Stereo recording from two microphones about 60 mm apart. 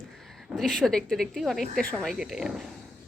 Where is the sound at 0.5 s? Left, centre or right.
Centre.